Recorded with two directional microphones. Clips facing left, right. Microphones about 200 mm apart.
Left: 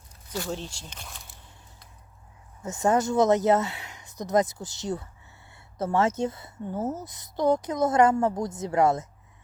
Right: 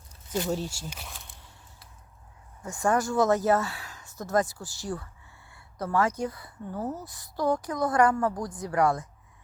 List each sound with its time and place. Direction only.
0.3 s speech: 20° right (ahead or behind)
0.5 s speech: 10° right (ahead or behind)
2.6 s speech: 20° left (ahead or behind)